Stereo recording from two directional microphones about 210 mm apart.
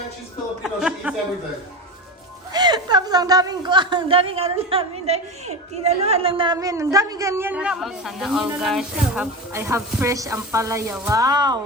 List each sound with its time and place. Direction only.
0.6 s speech: 5° right (ahead or behind)
2.5 s a man's voice: 20° right (ahead or behind)